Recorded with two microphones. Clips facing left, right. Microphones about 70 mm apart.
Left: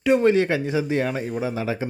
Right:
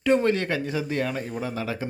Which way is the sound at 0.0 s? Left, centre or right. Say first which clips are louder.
Left 4 dB; centre.